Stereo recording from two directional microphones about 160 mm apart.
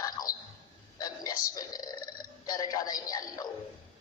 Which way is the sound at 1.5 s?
25° left (ahead or behind).